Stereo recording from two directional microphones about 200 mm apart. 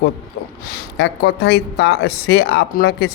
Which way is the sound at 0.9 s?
55° left (ahead or behind).